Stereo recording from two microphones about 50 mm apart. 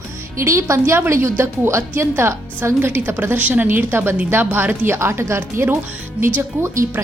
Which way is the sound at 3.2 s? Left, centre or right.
Right.